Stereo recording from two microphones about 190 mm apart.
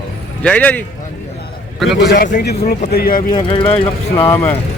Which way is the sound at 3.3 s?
30° left (ahead or behind).